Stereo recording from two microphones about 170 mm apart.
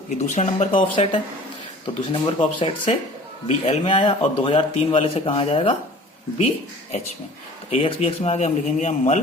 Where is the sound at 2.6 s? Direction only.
30° left (ahead or behind).